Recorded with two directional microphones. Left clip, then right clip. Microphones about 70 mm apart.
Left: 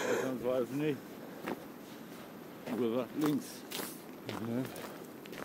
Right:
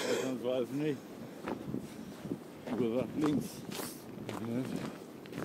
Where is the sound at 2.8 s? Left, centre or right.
Right.